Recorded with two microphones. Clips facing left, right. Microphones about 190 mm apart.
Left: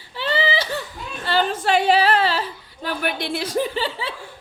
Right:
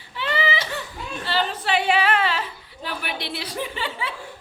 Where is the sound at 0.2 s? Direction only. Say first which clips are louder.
Left 3 dB; 30° left (ahead or behind).